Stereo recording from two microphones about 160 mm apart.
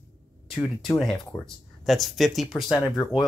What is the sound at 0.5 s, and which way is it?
Speech, centre (ahead or behind).